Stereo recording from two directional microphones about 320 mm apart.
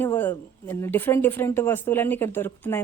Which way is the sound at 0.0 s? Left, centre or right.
Centre.